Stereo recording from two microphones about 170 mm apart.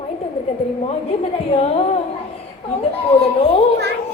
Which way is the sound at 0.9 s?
35° left (ahead or behind).